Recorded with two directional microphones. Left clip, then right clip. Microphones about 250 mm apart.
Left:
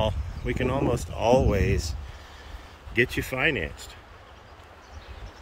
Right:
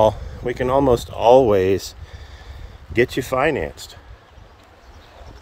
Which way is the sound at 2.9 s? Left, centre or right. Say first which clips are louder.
Right 6 dB; centre.